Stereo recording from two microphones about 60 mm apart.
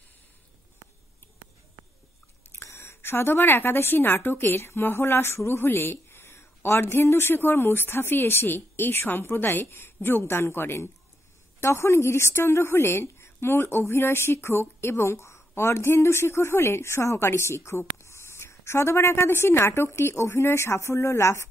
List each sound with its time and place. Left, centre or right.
2.5 s a woman's voice: left